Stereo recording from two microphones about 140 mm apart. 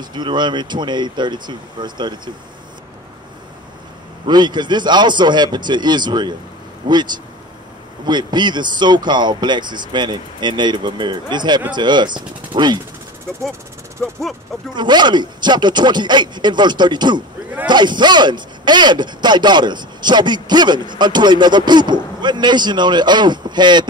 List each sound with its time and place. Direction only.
0.0 s speech: 35° right (ahead or behind)
4.3 s speech: 30° right (ahead or behind)
14.0 s speech: 5° left (ahead or behind)
14.7 s speech: 30° right (ahead or behind)